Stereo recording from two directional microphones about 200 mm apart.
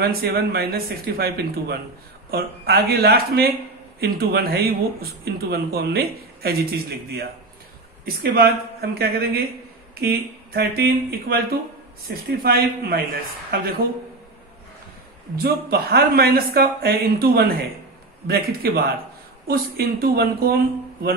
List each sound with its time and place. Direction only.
0.0 s speech: 50° right (ahead or behind)
15.3 s speech: 50° right (ahead or behind)